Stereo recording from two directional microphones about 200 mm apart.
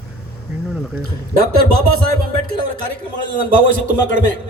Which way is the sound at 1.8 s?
90° right.